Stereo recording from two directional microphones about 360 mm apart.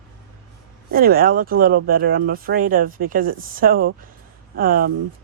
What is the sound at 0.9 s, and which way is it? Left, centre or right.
Speech, right.